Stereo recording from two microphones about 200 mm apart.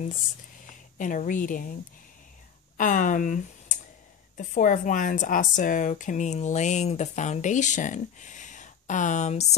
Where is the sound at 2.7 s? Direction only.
40° left (ahead or behind).